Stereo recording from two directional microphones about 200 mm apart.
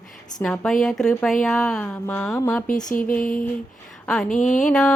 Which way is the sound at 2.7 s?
40° left (ahead or behind).